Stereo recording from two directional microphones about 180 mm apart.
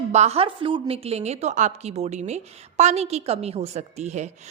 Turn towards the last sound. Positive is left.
turn(degrees=-40)  # may be behind; listen again after turning